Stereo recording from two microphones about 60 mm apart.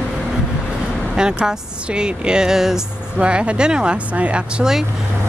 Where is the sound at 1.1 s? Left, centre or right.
Centre.